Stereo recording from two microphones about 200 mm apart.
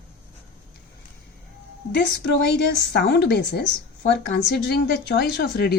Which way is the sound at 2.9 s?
55° left (ahead or behind).